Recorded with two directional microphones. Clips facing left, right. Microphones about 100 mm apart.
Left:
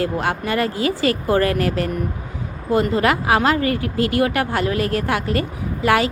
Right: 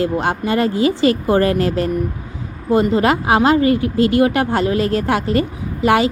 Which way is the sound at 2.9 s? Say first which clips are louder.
Right 3 dB; 25° right (ahead or behind).